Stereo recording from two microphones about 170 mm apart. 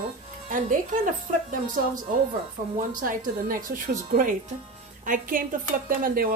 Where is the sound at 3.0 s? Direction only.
55° right (ahead or behind).